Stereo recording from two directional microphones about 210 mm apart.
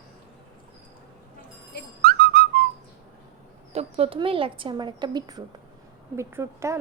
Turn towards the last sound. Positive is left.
turn(degrees=-10)  # may be behind; listen again after turning